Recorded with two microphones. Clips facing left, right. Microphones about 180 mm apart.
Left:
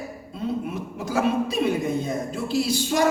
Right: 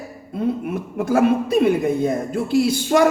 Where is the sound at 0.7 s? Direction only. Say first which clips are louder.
Right 7 dB; 55° right (ahead or behind).